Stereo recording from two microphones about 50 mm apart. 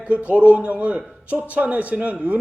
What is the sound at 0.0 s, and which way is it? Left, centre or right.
A man's voice, right.